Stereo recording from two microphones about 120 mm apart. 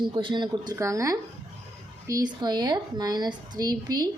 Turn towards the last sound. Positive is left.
turn(degrees=-35)  # may be behind; listen again after turning